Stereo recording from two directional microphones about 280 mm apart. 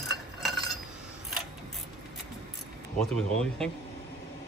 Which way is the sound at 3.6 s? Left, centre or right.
Centre.